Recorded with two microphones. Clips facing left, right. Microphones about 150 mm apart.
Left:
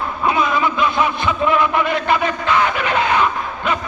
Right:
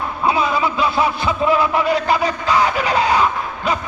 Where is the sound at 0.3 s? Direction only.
30° right (ahead or behind).